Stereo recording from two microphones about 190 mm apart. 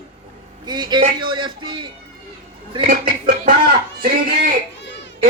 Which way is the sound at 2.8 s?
45° right (ahead or behind).